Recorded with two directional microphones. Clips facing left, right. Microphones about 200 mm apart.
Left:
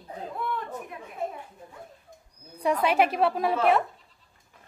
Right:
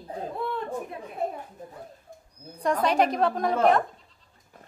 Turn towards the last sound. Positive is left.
turn(degrees=-45)  # may be behind; listen again after turning